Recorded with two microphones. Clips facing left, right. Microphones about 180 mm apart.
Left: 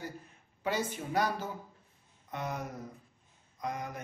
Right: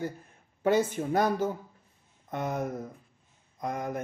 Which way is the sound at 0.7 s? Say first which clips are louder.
Right 9 dB; 50° right (ahead or behind).